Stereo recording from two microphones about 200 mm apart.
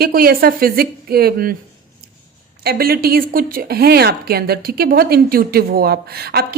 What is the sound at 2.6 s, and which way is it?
A woman's voice, 50° right (ahead or behind).